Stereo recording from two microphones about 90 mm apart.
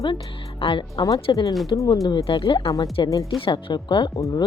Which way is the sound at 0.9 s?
40° left (ahead or behind).